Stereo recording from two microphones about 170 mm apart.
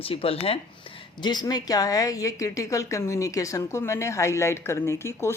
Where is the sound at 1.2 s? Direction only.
25° left (ahead or behind).